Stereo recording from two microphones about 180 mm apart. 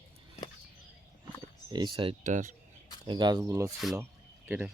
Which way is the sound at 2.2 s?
45° right (ahead or behind).